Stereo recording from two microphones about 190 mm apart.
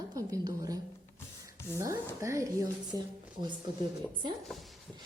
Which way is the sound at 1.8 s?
15° right (ahead or behind).